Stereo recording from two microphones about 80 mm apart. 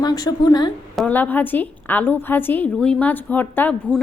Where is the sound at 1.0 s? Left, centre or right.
Left.